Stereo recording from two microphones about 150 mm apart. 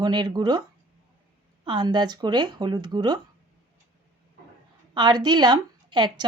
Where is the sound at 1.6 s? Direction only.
30° right (ahead or behind).